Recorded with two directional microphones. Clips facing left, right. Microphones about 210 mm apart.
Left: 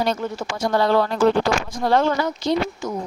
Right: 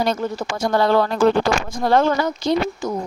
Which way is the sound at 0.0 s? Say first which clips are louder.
Right 2 dB; 45° right (ahead or behind).